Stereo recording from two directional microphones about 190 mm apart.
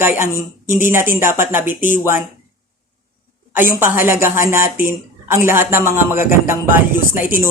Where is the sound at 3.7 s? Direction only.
10° right (ahead or behind).